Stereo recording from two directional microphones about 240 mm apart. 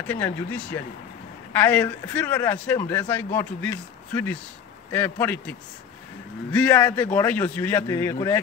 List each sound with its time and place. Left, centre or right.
0.0 s a man's voice: centre